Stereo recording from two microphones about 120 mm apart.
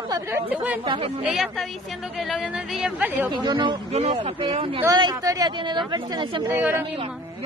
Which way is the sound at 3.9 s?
55° right (ahead or behind).